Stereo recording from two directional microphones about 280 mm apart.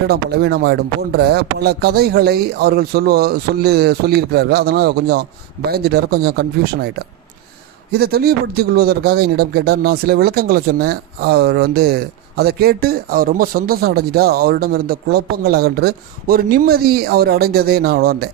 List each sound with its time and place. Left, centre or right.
0.1 s speech: right
7.9 s speech: right